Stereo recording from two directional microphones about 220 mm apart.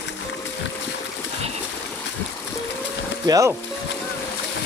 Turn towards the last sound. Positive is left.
turn(degrees=-15)  # may be behind; listen again after turning